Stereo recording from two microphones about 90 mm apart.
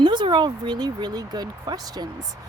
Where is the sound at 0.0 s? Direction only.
60° right (ahead or behind).